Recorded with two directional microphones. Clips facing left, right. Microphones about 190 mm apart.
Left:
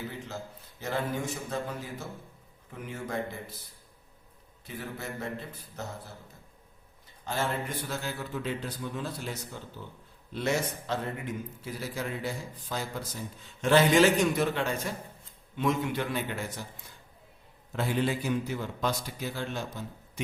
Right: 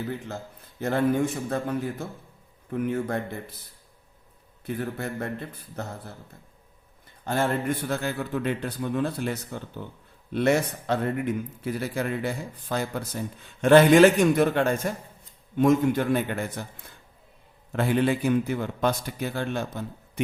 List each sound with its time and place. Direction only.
0.8 s speech: 55° right (ahead or behind)
4.6 s speech: 55° right (ahead or behind)
7.3 s a man's voice: 55° right (ahead or behind)
17.7 s speech: 60° right (ahead or behind)